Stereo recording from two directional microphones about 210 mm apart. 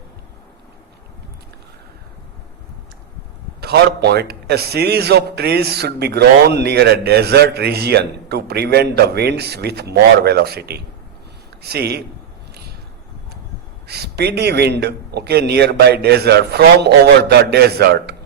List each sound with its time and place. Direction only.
3.6 s a man's voice: 50° right (ahead or behind)
13.8 s a man's voice: 50° right (ahead or behind)